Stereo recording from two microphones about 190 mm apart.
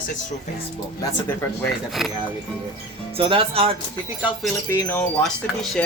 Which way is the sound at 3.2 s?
30° right (ahead or behind).